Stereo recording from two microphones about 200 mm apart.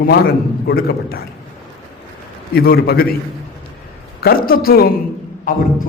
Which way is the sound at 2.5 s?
50° left (ahead or behind).